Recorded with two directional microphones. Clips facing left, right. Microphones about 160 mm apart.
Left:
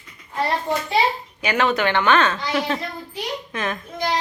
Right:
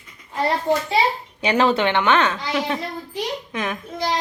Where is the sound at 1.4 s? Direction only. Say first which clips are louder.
Right 2 dB; 30° right (ahead or behind); by 3.8 s 15° right (ahead or behind).